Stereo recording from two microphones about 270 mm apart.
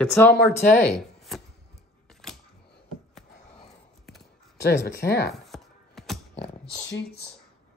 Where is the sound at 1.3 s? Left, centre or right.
Centre.